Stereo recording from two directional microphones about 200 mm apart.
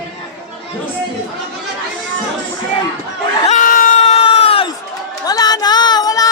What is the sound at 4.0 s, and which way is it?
Crowd, 30° left (ahead or behind).